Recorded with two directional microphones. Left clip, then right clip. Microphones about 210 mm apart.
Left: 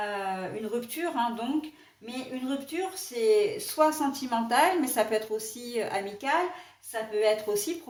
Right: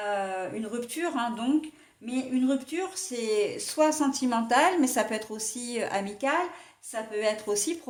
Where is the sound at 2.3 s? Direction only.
40° right (ahead or behind).